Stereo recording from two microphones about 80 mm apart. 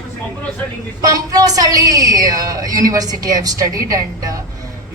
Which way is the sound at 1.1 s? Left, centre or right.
Right.